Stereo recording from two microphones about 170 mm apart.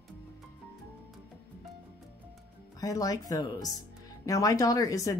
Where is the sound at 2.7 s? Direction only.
20° left (ahead or behind).